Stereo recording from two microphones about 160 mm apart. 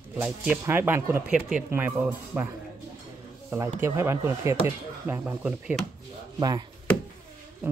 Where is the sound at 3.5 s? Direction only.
15° right (ahead or behind).